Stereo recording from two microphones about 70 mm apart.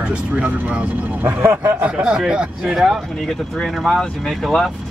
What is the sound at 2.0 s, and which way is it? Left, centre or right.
Speech, centre.